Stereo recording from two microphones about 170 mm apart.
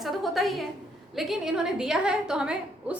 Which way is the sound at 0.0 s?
Centre (ahead or behind).